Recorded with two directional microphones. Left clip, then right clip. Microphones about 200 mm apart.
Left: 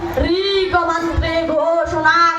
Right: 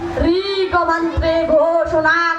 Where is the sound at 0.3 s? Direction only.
35° right (ahead or behind).